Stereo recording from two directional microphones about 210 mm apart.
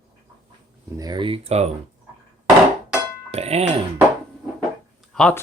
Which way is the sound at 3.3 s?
30° right (ahead or behind).